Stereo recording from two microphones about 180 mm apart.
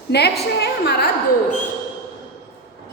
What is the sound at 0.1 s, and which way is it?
A woman's voice, 65° left (ahead or behind).